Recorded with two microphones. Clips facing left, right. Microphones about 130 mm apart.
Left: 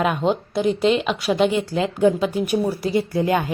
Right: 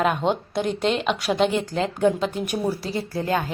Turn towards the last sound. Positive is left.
turn(degrees=15)  # may be behind; listen again after turning